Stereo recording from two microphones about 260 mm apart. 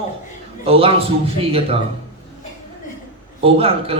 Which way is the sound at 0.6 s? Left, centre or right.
Right.